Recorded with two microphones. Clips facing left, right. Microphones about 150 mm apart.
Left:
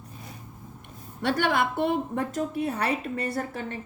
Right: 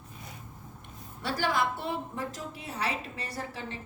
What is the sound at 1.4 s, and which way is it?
A woman's voice, 60° left (ahead or behind).